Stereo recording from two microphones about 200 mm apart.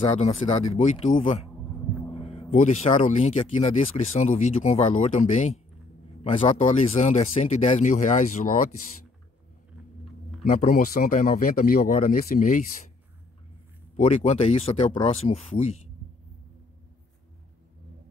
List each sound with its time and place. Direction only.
0.0 s speech: 35° left (ahead or behind)
2.0 s a sound: 30° left (ahead or behind)
2.5 s speech: 35° left (ahead or behind)
10.4 s speech: 45° left (ahead or behind)
13.9 s speech: 35° left (ahead or behind)